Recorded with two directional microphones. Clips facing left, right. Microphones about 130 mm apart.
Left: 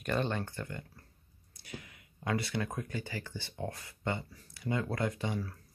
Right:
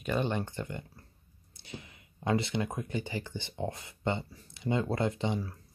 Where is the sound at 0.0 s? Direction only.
10° right (ahead or behind).